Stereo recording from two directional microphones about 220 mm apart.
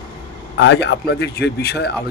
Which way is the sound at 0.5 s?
50° left (ahead or behind).